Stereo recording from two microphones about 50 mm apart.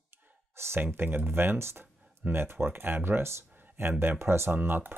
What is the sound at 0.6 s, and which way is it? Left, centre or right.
Speech, right.